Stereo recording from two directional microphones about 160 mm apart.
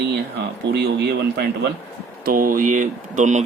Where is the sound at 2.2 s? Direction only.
65° right (ahead or behind).